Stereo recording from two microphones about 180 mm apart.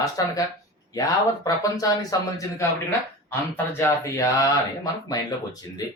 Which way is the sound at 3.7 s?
15° left (ahead or behind).